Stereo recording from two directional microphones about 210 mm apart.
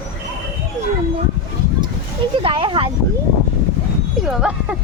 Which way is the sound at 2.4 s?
25° right (ahead or behind).